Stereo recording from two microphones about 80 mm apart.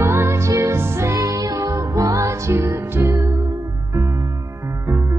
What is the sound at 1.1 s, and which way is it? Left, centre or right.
Music, right.